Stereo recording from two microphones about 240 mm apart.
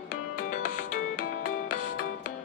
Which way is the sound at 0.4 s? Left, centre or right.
Left.